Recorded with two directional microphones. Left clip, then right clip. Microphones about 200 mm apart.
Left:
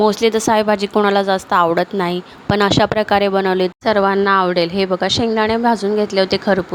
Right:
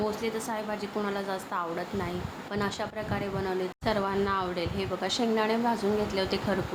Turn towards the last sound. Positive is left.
turn(degrees=40)  # may be behind; listen again after turning